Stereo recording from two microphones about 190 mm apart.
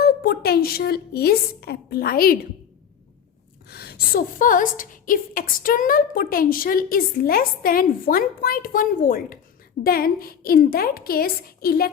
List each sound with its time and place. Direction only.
0.0 s speech: 55° left (ahead or behind)
3.7 s a woman's voice: 55° left (ahead or behind)